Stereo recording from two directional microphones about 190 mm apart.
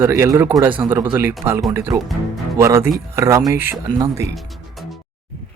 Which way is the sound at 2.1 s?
Centre (ahead or behind).